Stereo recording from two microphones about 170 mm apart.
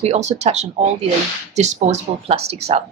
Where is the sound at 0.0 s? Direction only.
40° right (ahead or behind).